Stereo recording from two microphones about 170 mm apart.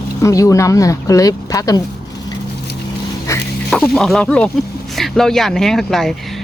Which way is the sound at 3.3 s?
20° left (ahead or behind).